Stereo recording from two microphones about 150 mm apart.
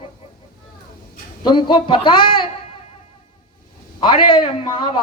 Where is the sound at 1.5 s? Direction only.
30° left (ahead or behind).